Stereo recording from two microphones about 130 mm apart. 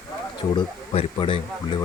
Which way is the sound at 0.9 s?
45° left (ahead or behind).